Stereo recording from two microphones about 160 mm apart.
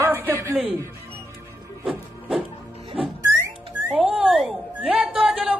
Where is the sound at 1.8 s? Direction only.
5° right (ahead or behind).